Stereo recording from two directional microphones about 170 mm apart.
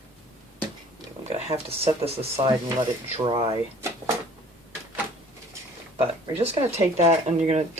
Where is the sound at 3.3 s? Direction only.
30° right (ahead or behind).